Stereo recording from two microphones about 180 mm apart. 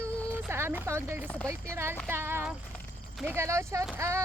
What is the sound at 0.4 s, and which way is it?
Speech, 10° right (ahead or behind).